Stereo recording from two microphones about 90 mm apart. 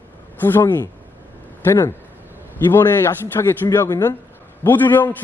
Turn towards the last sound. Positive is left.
turn(degrees=20)  # may be behind; listen again after turning